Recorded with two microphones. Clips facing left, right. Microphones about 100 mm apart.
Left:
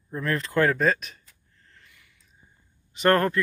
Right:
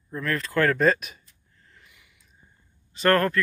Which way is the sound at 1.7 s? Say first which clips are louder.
Even; 15° right (ahead or behind).